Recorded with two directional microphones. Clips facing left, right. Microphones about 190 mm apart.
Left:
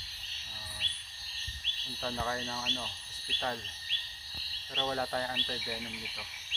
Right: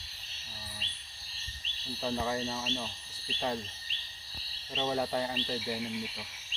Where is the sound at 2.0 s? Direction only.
15° right (ahead or behind).